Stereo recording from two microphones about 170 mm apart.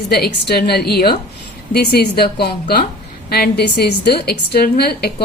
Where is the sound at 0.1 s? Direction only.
70° left (ahead or behind).